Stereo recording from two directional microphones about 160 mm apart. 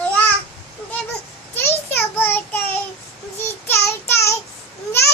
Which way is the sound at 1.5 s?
15° left (ahead or behind).